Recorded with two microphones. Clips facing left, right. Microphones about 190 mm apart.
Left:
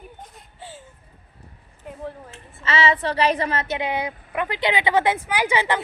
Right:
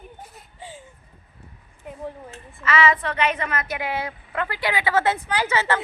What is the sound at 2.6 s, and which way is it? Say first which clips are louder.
A woman's voice: right 1 dB; 30° left (ahead or behind).